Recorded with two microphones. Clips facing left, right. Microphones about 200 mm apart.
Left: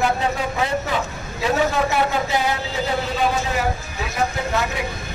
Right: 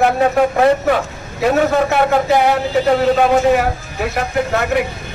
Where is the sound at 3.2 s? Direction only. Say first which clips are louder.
Right 9 dB; 65° right (ahead or behind).